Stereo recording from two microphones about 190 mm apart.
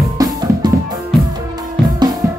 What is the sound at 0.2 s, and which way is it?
Music, 20° right (ahead or behind).